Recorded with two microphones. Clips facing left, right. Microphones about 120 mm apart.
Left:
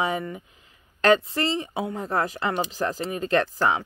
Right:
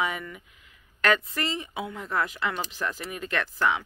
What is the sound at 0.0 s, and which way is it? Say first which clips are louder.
Speech: left 4 dB; 30° left (ahead or behind).